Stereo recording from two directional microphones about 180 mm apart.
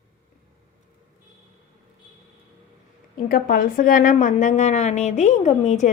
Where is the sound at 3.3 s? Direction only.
50° left (ahead or behind).